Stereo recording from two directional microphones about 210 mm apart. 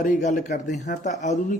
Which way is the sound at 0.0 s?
35° left (ahead or behind).